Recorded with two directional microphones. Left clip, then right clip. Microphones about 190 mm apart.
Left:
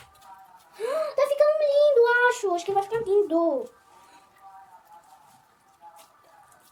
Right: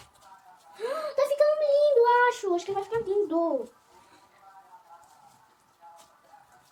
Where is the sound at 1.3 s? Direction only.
25° left (ahead or behind).